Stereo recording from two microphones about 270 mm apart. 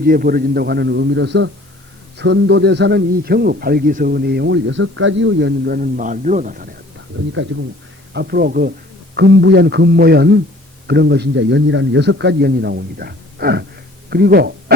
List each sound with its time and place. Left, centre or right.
0.0 s a man's voice: right
7.1 s a man's voice: right